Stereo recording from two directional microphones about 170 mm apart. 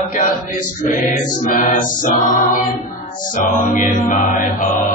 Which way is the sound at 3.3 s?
50° left (ahead or behind).